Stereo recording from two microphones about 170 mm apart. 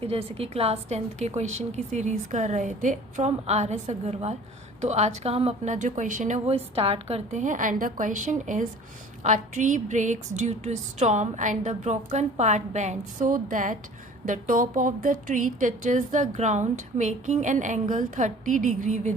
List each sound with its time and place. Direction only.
0.0 s a woman's voice: 35° right (ahead or behind)